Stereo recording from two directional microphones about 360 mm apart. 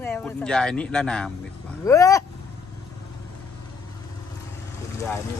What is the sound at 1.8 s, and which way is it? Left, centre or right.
Vehicle, centre.